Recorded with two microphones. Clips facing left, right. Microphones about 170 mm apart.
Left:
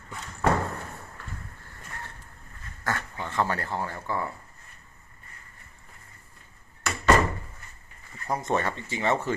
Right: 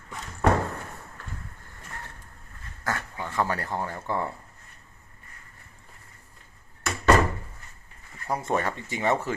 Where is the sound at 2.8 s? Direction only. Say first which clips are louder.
Even; 10° right (ahead or behind).